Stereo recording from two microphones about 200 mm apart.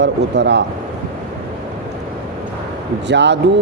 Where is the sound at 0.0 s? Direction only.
60° right (ahead or behind).